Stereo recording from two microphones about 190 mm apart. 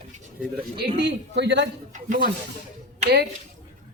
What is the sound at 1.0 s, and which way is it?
Speech, 65° right (ahead or behind).